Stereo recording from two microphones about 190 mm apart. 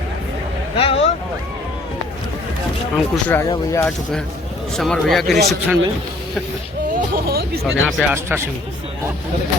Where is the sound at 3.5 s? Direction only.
15° left (ahead or behind).